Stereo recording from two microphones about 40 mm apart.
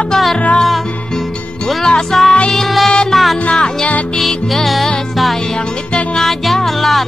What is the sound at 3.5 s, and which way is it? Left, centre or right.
Music, centre.